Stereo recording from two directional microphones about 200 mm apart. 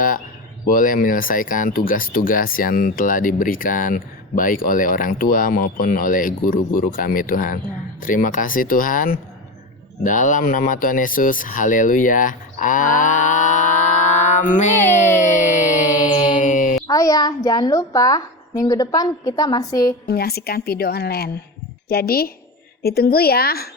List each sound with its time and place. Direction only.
0.7 s speech: 45° left (ahead or behind)
10.0 s a sound: 40° left (ahead or behind)
16.8 s a child's voice: 15° left (ahead or behind)
20.1 s speech: 50° left (ahead or behind)